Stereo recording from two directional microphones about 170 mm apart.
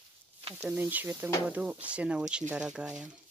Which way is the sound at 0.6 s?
10° right (ahead or behind).